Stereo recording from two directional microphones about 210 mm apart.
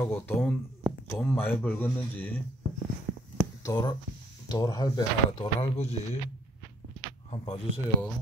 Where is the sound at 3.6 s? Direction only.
20° left (ahead or behind).